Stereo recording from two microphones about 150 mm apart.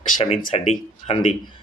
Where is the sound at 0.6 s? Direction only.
40° left (ahead or behind).